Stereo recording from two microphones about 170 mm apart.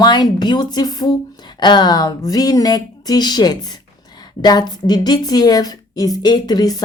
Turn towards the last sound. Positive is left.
turn(degrees=25)  # may be behind; listen again after turning